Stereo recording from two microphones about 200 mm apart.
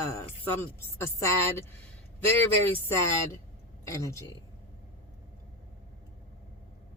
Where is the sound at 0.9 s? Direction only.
15° left (ahead or behind).